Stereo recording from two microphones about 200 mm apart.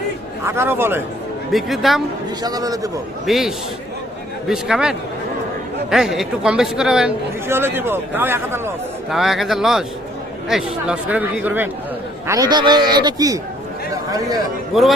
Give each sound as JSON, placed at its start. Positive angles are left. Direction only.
{"t": 0.4, "sound": "speech", "side_deg": -10}
{"t": 1.5, "sound": "speech", "side_deg": 0}
{"t": 2.4, "sound": "a man's voice", "side_deg": -20}
{"t": 3.2, "sound": "speech", "side_deg": 0}
{"t": 12.3, "sound": "a man's voice", "side_deg": -20}
{"t": 13.9, "sound": "a sound", "side_deg": -20}
{"t": 14.7, "sound": "a man's voice", "side_deg": 0}